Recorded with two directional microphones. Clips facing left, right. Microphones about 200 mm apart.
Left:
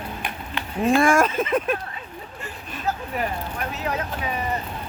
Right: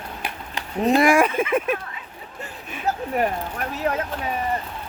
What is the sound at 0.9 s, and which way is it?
Speech, 15° right (ahead or behind).